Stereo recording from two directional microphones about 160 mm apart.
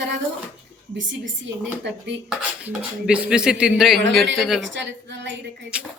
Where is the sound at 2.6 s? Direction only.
5° right (ahead or behind).